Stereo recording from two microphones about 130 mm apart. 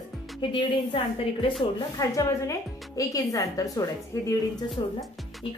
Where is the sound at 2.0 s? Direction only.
25° left (ahead or behind).